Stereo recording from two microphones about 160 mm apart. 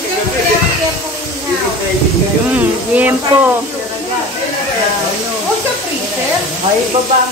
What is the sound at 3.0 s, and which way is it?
Speech, 10° right (ahead or behind).